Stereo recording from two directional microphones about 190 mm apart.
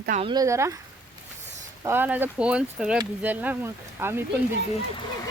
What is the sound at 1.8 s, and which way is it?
Speech, 10° right (ahead or behind).